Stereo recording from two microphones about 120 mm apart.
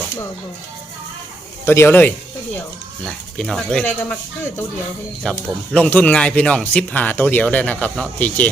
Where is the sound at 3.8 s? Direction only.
20° left (ahead or behind).